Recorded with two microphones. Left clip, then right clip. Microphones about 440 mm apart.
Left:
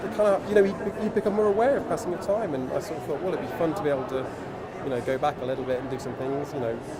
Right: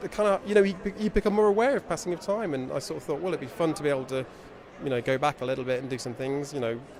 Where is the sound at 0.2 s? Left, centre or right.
Right.